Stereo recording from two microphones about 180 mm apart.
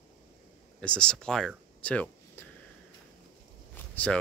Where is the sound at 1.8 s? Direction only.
5° left (ahead or behind).